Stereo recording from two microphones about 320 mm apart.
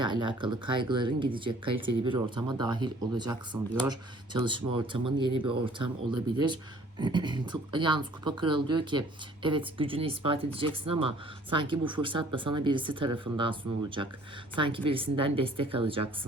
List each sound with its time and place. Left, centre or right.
0.0 s speech: centre